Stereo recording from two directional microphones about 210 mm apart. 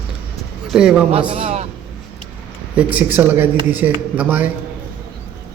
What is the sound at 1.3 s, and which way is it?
Speech, 30° right (ahead or behind).